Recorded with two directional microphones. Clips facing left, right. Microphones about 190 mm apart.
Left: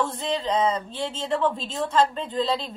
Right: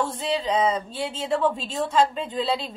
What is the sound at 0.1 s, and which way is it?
Speech, 10° right (ahead or behind).